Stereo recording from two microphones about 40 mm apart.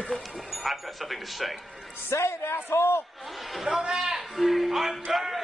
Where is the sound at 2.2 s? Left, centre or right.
Left.